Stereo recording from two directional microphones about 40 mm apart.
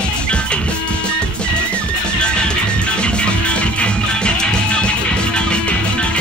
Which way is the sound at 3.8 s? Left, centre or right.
Left.